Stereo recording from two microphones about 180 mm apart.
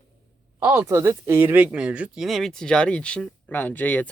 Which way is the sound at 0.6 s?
15° right (ahead or behind).